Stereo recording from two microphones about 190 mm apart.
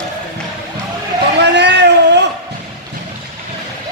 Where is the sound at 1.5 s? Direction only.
65° right (ahead or behind).